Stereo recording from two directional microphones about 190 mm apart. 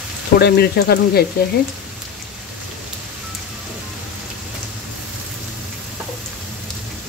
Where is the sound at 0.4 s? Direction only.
55° left (ahead or behind).